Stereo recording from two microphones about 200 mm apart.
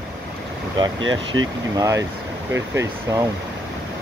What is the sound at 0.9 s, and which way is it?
Speech, 75° right (ahead or behind).